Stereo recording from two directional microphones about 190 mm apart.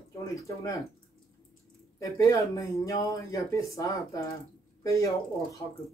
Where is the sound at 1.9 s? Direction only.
15° left (ahead or behind).